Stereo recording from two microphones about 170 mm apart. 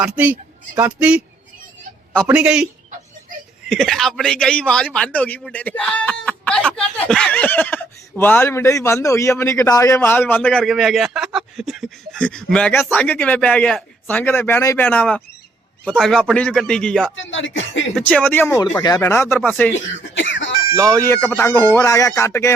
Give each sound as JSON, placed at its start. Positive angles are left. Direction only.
{"t": 0.0, "sound": "a man's voice", "side_deg": -10}
{"t": 2.2, "sound": "a man's voice", "side_deg": -5}
{"t": 3.7, "sound": "speech", "side_deg": 0}
{"t": 17.2, "sound": "speech", "side_deg": 90}
{"t": 17.9, "sound": "speech", "side_deg": 5}
{"t": 20.0, "sound": "cough", "side_deg": 90}
{"t": 20.9, "sound": "speech", "side_deg": 15}